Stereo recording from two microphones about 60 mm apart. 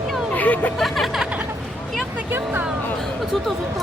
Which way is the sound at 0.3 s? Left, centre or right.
Left.